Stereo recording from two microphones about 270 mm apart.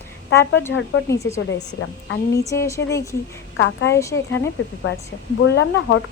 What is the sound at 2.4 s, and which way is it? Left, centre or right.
Speech, centre.